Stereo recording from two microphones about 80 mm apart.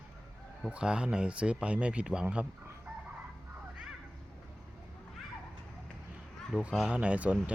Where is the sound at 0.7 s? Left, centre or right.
Centre.